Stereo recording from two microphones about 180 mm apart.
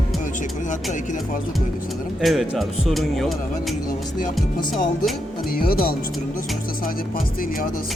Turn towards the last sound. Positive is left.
turn(degrees=50)  # may be behind; listen again after turning